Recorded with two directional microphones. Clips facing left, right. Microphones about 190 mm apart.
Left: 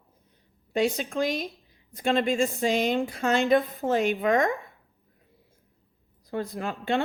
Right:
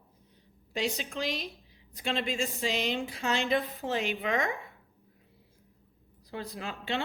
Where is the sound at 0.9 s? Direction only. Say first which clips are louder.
Left 7 dB; 50° left (ahead or behind).